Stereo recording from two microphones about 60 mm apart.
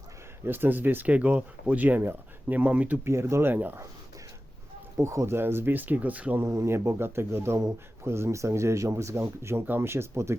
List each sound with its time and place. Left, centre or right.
0.4 s speech: right
3.0 s speech: right
3.5 s speech: right
4.9 s speech: right
6.4 s speech: right
9.1 s speech: right